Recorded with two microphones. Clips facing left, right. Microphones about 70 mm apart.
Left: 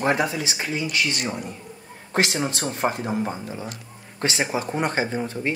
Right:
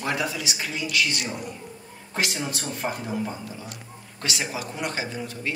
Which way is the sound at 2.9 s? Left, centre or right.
Left.